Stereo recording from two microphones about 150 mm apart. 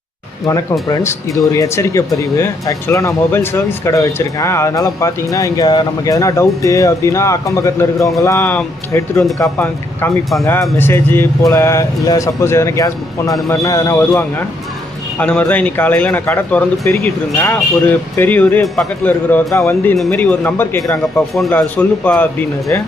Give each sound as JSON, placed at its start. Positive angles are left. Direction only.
{"t": 0.4, "sound": "speech", "side_deg": 25}
{"t": 15.2, "sound": "speech", "side_deg": 10}
{"t": 21.2, "sound": "speech", "side_deg": 0}